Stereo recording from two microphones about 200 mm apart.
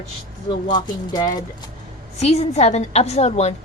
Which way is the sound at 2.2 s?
30° left (ahead or behind).